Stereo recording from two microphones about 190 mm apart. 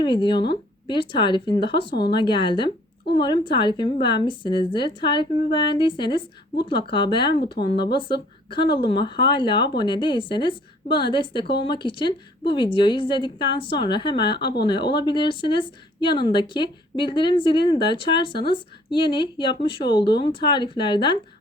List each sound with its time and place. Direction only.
0.0 s a woman's voice: 25° left (ahead or behind)